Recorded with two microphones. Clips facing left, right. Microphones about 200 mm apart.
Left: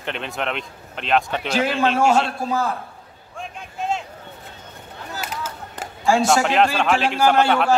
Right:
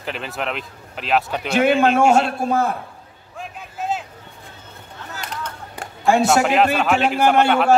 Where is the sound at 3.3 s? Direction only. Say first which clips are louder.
Even; 5° right (ahead or behind).